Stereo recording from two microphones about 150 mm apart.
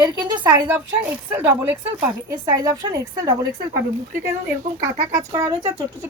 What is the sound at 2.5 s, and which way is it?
Speech, 25° right (ahead or behind).